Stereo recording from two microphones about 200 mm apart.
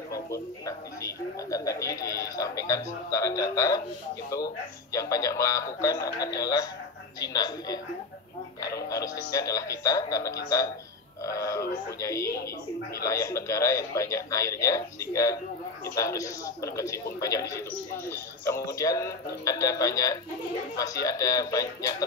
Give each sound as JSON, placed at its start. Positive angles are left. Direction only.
{"t": 0.1, "sound": "a man's voice", "side_deg": 15}
{"t": 4.9, "sound": "a man's voice", "side_deg": 15}